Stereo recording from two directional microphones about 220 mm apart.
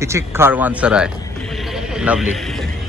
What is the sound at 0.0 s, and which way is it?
Speech, 10° right (ahead or behind).